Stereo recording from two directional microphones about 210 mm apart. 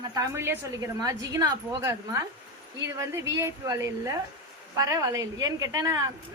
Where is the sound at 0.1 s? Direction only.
15° right (ahead or behind).